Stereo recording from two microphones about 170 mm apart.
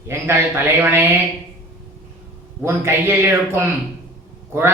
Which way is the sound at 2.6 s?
15° right (ahead or behind).